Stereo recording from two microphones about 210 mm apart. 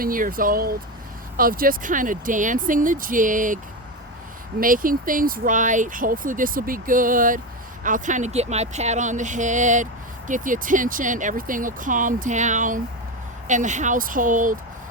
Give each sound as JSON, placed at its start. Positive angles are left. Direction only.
{"t": 0.0, "sound": "speech", "side_deg": -40}
{"t": 4.6, "sound": "speech", "side_deg": -40}